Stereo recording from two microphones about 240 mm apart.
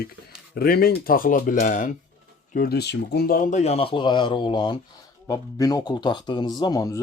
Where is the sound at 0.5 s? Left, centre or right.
Left.